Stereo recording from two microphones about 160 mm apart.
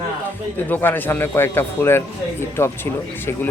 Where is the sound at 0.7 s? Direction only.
10° left (ahead or behind).